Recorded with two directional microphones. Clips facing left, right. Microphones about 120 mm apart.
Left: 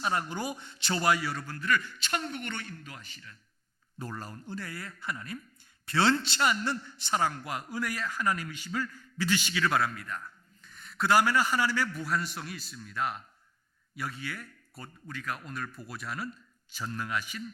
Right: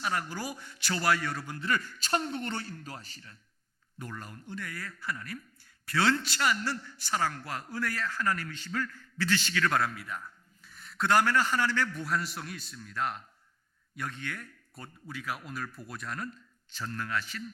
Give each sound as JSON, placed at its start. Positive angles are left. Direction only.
{"t": 0.0, "sound": "a man's voice", "side_deg": 25}
{"t": 1.2, "sound": "speech", "side_deg": 0}
{"t": 1.5, "sound": "a man's voice", "side_deg": -25}
{"t": 2.0, "sound": "speech", "side_deg": -35}
{"t": 3.9, "sound": "a man's voice", "side_deg": 35}
{"t": 15.0, "sound": "speech", "side_deg": -5}